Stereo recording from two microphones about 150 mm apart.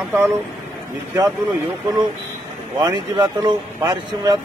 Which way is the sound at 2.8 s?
25° right (ahead or behind).